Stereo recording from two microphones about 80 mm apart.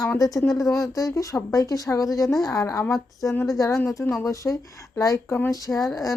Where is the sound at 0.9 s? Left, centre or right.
Left.